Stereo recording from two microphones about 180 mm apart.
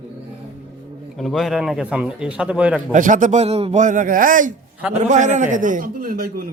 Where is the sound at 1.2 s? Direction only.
Centre (ahead or behind).